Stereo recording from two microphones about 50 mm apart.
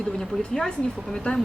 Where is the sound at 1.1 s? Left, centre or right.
Centre.